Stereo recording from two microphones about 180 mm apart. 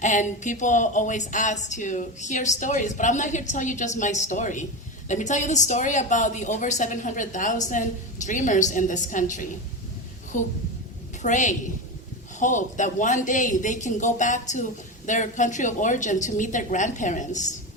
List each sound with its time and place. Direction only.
0.0 s speech: 45° left (ahead or behind)